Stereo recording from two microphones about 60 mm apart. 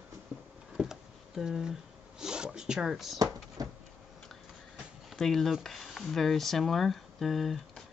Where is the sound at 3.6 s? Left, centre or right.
Right.